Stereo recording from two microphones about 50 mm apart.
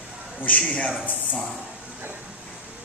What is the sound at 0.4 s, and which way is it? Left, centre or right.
Speech, left.